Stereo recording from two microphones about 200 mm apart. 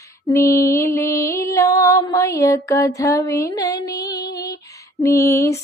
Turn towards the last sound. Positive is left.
turn(degrees=15)  # may be behind; listen again after turning